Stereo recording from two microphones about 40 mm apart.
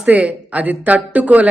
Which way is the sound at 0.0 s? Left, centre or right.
Right.